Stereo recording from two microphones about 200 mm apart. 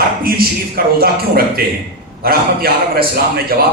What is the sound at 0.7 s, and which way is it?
Speech, 50° right (ahead or behind).